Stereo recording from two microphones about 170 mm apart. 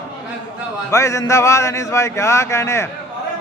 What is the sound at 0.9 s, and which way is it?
A man's voice, 15° left (ahead or behind).